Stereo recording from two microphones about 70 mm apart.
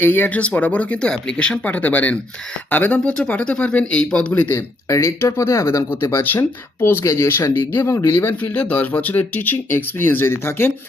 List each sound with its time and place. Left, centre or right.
0.0 s speech: left
4.5 s speech: left
7.0 s speech: left
7.7 s speech: left